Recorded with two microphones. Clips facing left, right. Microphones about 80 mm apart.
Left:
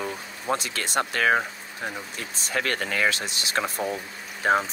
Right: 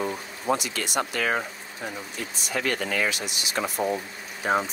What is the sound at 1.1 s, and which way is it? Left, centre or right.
Speech, left.